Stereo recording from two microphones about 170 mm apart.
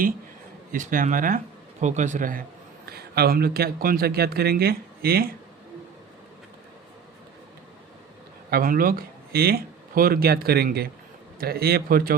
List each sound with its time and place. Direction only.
0.7 s speech: 50° right (ahead or behind)
2.9 s speech: 65° right (ahead or behind)
8.4 s speech: 60° right (ahead or behind)